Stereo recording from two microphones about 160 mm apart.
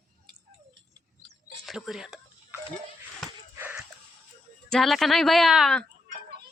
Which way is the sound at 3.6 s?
10° right (ahead or behind).